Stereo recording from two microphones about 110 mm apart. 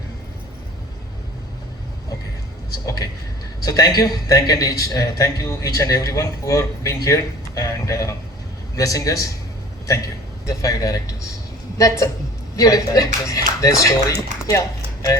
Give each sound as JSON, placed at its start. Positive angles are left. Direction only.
{"t": 2.8, "sound": "a man's voice", "side_deg": 35}
{"t": 10.4, "sound": "a man's voice", "side_deg": 30}